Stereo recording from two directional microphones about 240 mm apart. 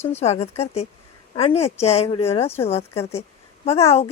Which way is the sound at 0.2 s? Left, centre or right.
Left.